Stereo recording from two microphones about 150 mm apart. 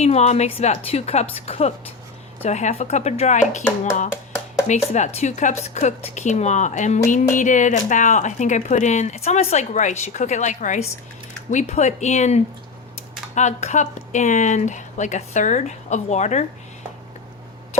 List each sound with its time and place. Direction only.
0.0 s speech: 45° left (ahead or behind)
4.7 s speech: 50° left (ahead or behind)